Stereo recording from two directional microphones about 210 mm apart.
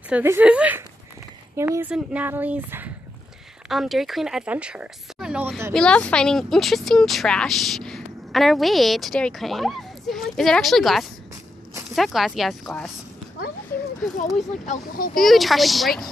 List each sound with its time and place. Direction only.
0.1 s speech: 10° right (ahead or behind)
5.7 s speech: 5° left (ahead or behind)
14.3 s speech: 40° left (ahead or behind)
15.1 s speech: centre (ahead or behind)